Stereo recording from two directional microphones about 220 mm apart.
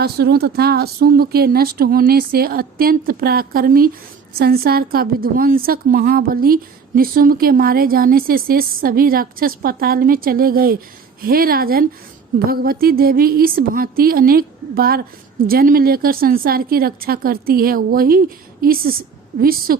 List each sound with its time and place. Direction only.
0.0 s a woman's voice: 45° right (ahead or behind)